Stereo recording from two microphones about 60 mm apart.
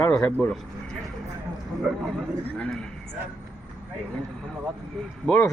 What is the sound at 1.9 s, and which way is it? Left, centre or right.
Speech, centre.